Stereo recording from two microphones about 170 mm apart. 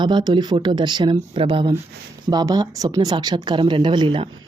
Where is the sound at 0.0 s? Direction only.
25° right (ahead or behind).